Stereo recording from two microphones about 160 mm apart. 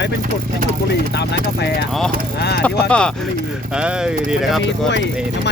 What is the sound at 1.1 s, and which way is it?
Speech, 90° left.